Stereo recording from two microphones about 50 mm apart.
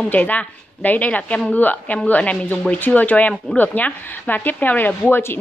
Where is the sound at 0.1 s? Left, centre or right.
Left.